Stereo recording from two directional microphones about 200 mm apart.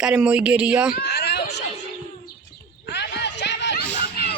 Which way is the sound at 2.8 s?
60° left (ahead or behind).